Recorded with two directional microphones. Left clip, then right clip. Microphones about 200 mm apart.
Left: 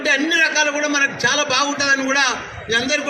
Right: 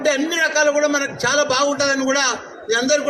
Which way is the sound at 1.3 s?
55° right (ahead or behind).